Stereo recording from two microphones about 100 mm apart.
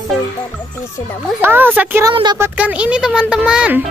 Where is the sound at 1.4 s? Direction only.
20° right (ahead or behind).